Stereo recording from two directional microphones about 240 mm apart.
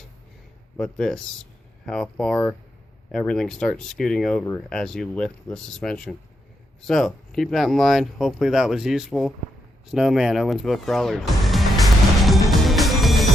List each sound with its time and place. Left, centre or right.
0.8 s speech: centre
9.9 s music: centre